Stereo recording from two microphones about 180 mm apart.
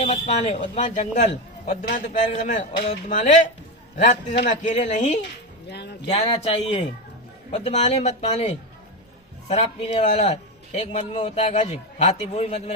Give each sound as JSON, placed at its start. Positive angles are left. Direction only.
{"t": 0.0, "sound": "speech", "side_deg": 40}
{"t": 1.3, "sound": "a man's voice", "side_deg": 55}
{"t": 5.6, "sound": "speech", "side_deg": 65}
{"t": 6.1, "sound": "a man's voice", "side_deg": 35}